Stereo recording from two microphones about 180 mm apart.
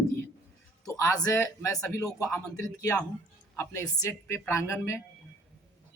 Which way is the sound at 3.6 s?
15° left (ahead or behind).